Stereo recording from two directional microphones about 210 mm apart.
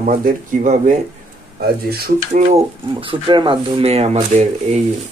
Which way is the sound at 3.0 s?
25° right (ahead or behind).